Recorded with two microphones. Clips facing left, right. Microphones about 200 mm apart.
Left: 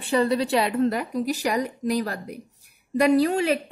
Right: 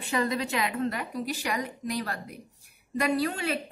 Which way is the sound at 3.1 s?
40° left (ahead or behind).